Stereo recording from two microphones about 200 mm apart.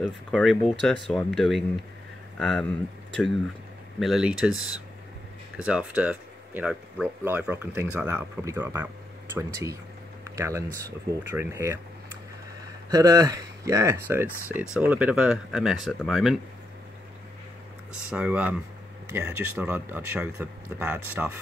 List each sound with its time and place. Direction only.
0.0 s speech: 5° left (ahead or behind)
4.0 s speech: 5° right (ahead or behind)
4.5 s speech: 90° right
5.7 s speech: 5° right (ahead or behind)
12.9 s speech: 15° right (ahead or behind); by 16.3 s centre (ahead or behind)
18.1 s speech: 5° right (ahead or behind)